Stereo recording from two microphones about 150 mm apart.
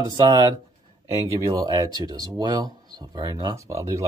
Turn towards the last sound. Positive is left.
turn(degrees=-20)  # may be behind; listen again after turning